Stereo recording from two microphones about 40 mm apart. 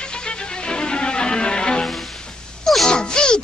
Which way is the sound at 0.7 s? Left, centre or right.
Left.